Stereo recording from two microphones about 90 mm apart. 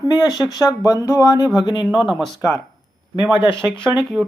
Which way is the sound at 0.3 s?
45° left (ahead or behind).